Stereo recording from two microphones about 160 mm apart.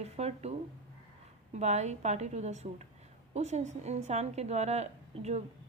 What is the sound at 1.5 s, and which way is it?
A woman's voice, 45° right (ahead or behind).